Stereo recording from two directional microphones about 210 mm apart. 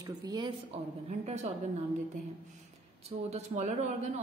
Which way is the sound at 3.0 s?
30° right (ahead or behind).